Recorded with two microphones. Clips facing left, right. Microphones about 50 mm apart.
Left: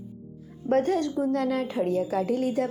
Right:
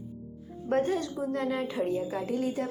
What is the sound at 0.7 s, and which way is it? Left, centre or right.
Speech, left.